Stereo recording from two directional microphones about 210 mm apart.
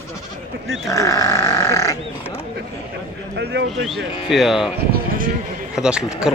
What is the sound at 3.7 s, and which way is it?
A man's voice, centre (ahead or behind).